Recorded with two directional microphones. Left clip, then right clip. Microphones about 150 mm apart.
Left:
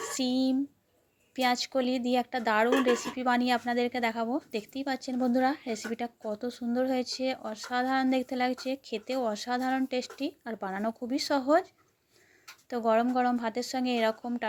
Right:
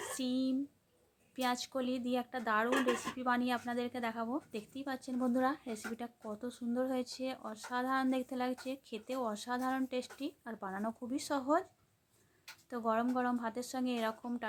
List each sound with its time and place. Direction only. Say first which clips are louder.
0.2 s speech: left 8 dB; 20° left (ahead or behind)
12.6 s speech: left 8 dB; 20° left (ahead or behind)